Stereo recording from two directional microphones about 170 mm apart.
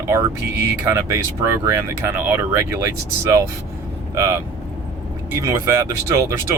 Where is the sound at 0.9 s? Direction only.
15° right (ahead or behind).